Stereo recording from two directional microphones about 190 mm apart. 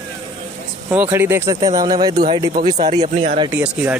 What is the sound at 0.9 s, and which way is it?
Speech, 10° right (ahead or behind).